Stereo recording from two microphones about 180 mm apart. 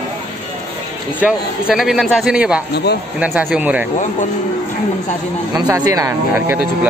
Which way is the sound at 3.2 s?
5° right (ahead or behind).